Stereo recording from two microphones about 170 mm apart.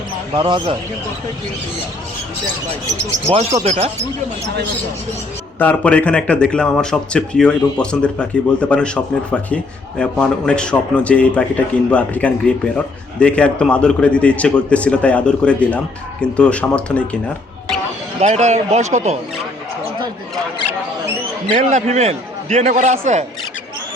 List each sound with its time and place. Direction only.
0.3 s speech: 30° right (ahead or behind)
3.3 s speech: 35° right (ahead or behind)
5.5 s a man's voice: 10° left (ahead or behind)
10.0 s a man's voice: 5° left (ahead or behind)
18.2 s speech: 40° right (ahead or behind)
21.6 s a man's voice: 45° right (ahead or behind)